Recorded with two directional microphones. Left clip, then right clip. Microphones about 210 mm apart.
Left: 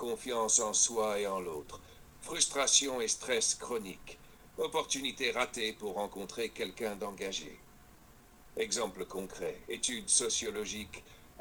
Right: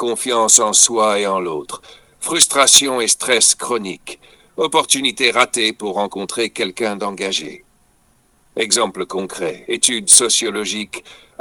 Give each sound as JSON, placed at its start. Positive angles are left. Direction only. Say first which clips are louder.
{"t": 0.0, "sound": "speech", "louder": "right 17 dB", "side_deg": -40}